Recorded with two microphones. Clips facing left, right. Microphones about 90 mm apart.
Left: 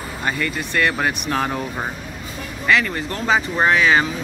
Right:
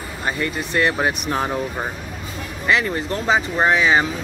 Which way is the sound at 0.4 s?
20° right (ahead or behind).